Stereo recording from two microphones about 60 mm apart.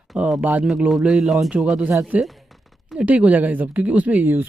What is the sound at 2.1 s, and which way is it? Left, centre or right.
Speech, right.